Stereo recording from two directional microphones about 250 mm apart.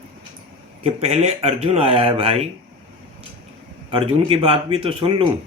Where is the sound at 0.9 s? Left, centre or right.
Right.